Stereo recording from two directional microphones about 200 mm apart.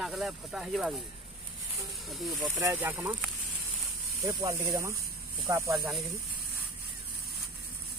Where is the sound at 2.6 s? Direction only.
10° right (ahead or behind).